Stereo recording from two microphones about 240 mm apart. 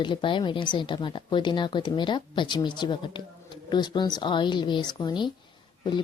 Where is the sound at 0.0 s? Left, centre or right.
Centre.